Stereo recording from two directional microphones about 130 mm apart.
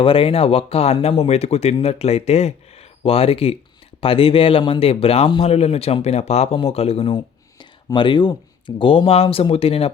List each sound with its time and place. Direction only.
0.0 s speech: 45° left (ahead or behind)
7.6 s speech: 35° left (ahead or behind)